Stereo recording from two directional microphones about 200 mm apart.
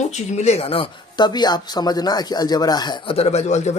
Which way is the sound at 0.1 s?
35° left (ahead or behind).